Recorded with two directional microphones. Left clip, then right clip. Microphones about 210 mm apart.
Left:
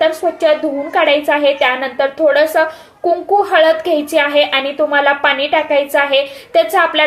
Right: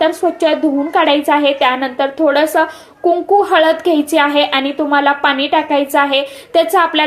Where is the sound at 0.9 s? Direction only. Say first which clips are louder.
Even; 25° right (ahead or behind).